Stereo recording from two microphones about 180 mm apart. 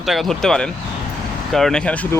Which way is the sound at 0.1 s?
Centre (ahead or behind).